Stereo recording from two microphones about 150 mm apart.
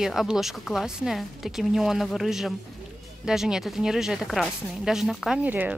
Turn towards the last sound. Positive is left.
turn(degrees=-10)  # may be behind; listen again after turning